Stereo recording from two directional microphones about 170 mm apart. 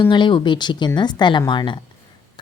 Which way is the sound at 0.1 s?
30° left (ahead or behind).